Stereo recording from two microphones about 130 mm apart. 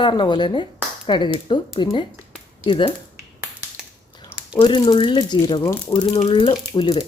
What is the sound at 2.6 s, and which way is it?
Speech, 40° left (ahead or behind).